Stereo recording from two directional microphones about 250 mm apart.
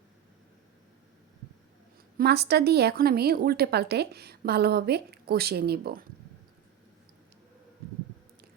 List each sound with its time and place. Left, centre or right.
2.1 s speech: right